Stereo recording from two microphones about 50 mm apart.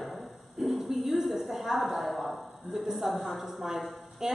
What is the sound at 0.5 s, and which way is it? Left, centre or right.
A woman's voice, centre.